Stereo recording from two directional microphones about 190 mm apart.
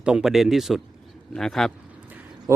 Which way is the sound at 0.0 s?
5° right (ahead or behind).